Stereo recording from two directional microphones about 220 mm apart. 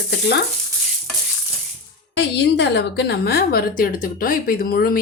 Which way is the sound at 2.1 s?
50° left (ahead or behind).